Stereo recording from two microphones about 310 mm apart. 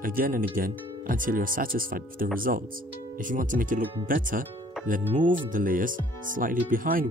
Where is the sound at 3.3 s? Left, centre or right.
Right.